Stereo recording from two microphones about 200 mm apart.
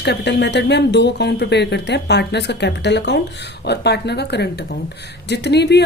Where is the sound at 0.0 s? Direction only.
60° left (ahead or behind).